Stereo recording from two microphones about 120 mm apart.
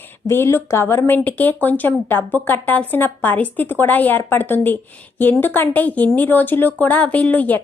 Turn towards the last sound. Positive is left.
turn(degrees=15)  # may be behind; listen again after turning